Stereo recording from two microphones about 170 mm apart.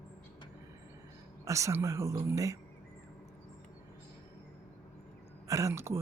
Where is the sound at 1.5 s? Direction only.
20° right (ahead or behind).